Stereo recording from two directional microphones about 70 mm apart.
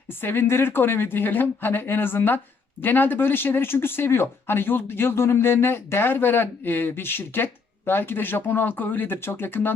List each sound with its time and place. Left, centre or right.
0.1 s speech: left